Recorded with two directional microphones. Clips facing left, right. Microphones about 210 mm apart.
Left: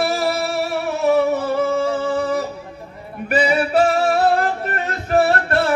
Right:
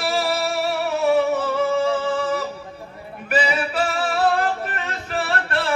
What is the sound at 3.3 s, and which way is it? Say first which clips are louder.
Music: left 5 dB; 45° left (ahead or behind).